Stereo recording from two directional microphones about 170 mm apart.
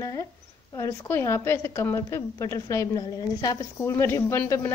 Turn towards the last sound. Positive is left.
turn(degrees=15)  # may be behind; listen again after turning